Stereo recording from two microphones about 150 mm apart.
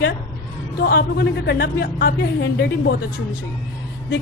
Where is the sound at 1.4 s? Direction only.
90° left.